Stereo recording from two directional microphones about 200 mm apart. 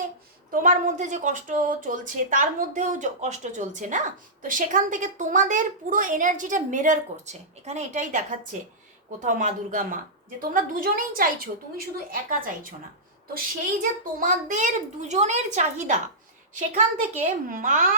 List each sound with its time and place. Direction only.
0.5 s a woman's voice: 40° right (ahead or behind)
14.2 s a woman's voice: 40° right (ahead or behind)